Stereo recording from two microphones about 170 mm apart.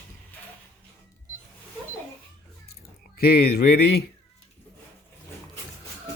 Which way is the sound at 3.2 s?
65° left (ahead or behind).